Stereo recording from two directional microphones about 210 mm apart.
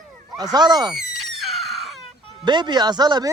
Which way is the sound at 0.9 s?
Centre (ahead or behind).